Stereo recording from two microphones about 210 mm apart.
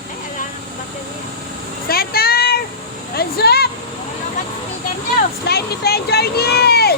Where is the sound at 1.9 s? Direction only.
45° left (ahead or behind).